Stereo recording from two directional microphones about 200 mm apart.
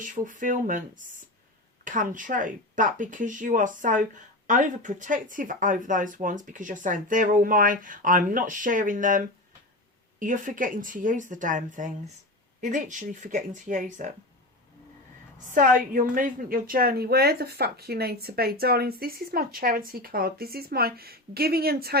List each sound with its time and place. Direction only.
0.0 s speech: 40° right (ahead or behind)
15.4 s a woman's voice: 40° right (ahead or behind)